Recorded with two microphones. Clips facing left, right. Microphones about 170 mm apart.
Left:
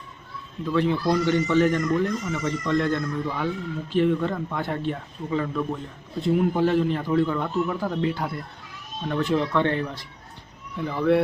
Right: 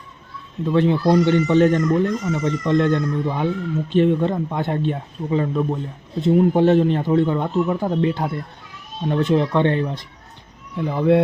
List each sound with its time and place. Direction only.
0.6 s speech: 25° right (ahead or behind)